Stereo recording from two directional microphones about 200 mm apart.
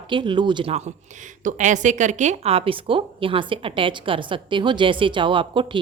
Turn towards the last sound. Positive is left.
turn(degrees=-25)  # may be behind; listen again after turning